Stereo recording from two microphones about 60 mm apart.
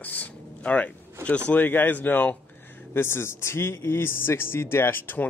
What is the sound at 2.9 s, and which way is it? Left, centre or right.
Speech, left.